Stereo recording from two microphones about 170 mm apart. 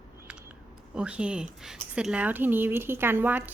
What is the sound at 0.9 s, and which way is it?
Speech, 5° right (ahead or behind).